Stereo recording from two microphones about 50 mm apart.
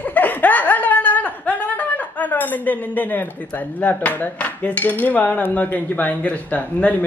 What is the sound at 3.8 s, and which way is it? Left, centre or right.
Cutlery, left.